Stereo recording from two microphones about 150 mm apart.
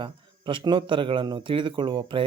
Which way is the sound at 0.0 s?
35° right (ahead or behind).